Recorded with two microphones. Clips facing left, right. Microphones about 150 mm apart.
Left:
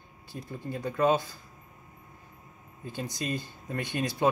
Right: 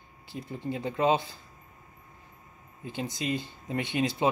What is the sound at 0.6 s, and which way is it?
Speech, 20° right (ahead or behind).